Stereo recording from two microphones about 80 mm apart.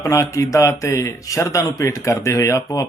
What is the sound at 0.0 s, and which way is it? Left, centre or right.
A man's voice, left.